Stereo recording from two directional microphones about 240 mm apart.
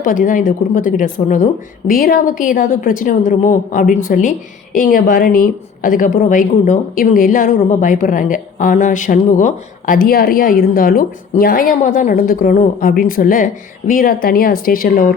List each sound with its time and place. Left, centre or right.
0.0 s a woman's voice: left